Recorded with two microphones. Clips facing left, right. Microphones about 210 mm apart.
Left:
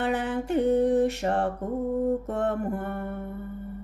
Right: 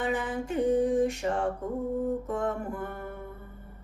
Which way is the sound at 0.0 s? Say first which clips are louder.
Left 3 dB; 70° left (ahead or behind).